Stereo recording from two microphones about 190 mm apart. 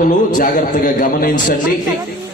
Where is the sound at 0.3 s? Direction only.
45° left (ahead or behind).